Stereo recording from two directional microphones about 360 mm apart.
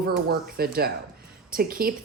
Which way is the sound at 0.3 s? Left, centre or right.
Right.